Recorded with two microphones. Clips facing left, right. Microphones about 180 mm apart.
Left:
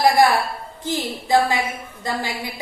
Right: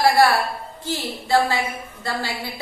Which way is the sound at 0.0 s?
15° left (ahead or behind).